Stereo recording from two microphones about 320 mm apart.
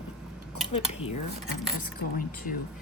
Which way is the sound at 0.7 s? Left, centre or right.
Centre.